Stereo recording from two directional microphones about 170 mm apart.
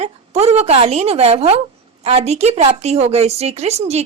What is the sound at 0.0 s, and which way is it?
A woman's voice, 40° right (ahead or behind).